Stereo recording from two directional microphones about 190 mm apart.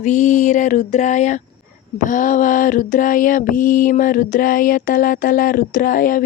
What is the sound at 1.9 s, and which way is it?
Mantra, 45° left (ahead or behind).